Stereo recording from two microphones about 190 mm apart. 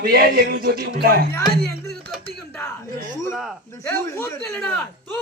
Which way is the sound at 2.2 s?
10° left (ahead or behind).